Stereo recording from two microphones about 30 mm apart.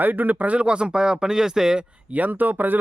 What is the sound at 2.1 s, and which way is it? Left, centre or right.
Speech, right.